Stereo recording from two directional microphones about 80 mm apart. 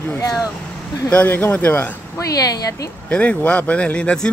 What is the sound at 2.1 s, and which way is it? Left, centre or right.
Speech, left.